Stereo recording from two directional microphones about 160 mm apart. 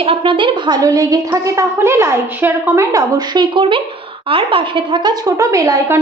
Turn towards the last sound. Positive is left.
turn(degrees=-15)  # may be behind; listen again after turning